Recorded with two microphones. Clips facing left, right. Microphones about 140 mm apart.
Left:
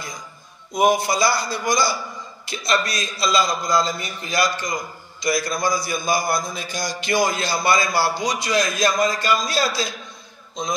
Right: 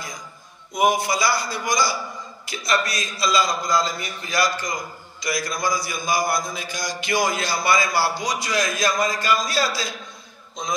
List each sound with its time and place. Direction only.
0.7 s a man's voice: 30° left (ahead or behind)